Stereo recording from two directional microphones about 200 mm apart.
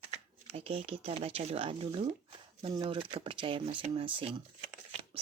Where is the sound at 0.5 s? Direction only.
30° right (ahead or behind).